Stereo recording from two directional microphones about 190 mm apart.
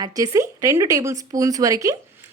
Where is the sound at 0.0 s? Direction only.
20° right (ahead or behind).